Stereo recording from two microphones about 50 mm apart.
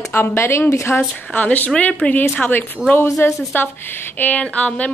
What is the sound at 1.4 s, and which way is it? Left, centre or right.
A woman's voice, left.